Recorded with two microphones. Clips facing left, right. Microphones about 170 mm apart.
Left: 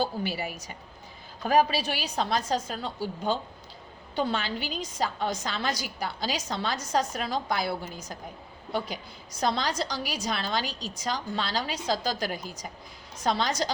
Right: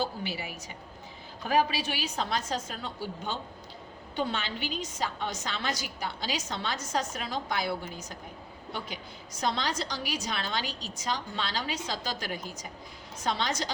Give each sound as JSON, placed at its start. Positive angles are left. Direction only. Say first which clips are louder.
{"t": 0.3, "sound": "a woman's voice", "louder": "left 4 dB", "side_deg": 50}
{"t": 1.5, "sound": "a woman's voice", "louder": "left 4 dB", "side_deg": 35}
{"t": 9.4, "sound": "a woman's voice", "louder": "left 3 dB", "side_deg": 35}